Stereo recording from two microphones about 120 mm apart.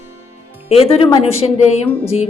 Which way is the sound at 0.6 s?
55° left (ahead or behind).